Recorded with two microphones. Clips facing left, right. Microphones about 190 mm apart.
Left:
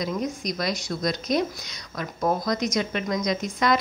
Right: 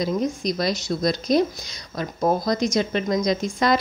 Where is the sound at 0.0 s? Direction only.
30° right (ahead or behind).